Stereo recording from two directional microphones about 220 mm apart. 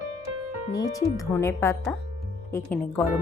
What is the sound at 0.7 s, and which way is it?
Speech, 15° left (ahead or behind).